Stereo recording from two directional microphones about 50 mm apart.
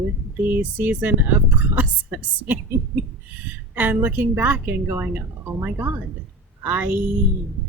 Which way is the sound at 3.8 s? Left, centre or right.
Right.